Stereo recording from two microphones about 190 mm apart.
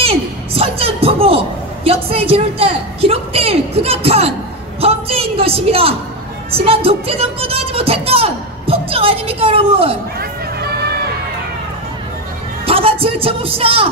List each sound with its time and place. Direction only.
0.0 s a man's voice: 30° right (ahead or behind)
12.6 s a man's voice: 30° right (ahead or behind)